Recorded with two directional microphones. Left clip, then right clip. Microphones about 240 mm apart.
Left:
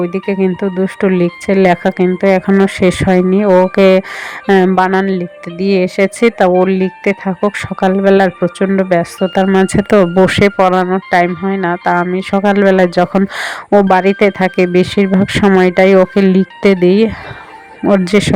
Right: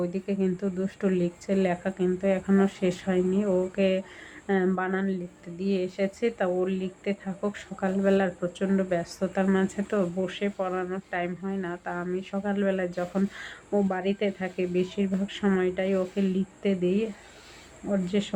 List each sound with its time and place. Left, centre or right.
0.0 s speech: left